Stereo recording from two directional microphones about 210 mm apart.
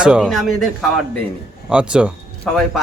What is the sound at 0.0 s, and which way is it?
Speech, 5° right (ahead or behind).